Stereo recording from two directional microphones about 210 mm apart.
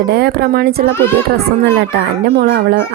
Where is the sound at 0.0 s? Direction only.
50° right (ahead or behind).